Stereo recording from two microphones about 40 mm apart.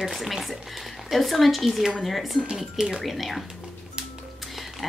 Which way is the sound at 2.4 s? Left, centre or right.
Centre.